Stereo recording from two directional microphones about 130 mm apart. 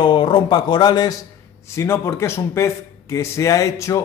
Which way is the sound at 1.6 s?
20° left (ahead or behind).